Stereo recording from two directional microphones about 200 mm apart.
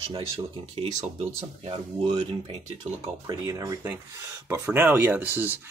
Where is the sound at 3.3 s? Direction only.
15° right (ahead or behind).